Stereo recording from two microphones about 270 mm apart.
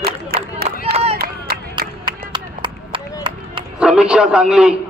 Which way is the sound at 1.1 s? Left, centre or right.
Right.